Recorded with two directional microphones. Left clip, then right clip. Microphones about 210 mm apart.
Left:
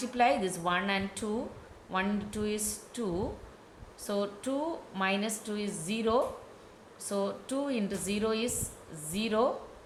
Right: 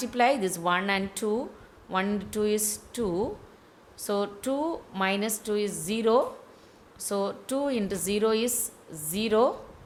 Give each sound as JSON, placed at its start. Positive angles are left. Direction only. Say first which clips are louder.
{"t": 0.0, "sound": "a woman's voice", "louder": "right 3 dB", "side_deg": -55}